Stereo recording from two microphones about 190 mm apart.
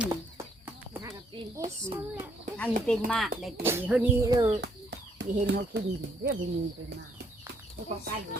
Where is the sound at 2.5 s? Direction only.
5° left (ahead or behind).